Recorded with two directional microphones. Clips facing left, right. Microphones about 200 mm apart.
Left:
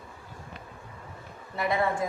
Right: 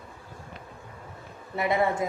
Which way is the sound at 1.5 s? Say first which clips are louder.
Right 2 dB; 20° right (ahead or behind).